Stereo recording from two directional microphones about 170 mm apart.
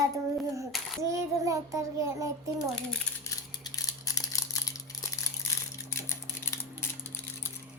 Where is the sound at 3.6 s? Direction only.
20° left (ahead or behind).